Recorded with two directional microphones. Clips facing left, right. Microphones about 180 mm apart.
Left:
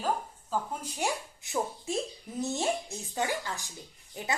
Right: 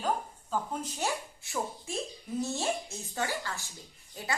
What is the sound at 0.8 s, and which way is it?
Speech, 15° left (ahead or behind).